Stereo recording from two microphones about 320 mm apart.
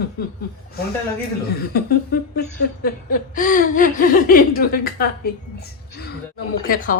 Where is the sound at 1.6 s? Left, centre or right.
Left.